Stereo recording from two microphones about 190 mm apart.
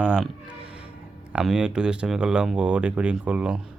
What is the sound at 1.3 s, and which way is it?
Speech, 5° right (ahead or behind).